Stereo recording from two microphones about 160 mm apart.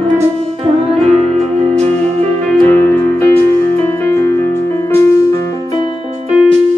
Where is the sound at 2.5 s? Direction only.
5° left (ahead or behind).